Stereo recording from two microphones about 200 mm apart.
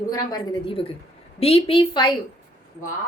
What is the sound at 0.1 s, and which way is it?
A woman's voice, 20° left (ahead or behind).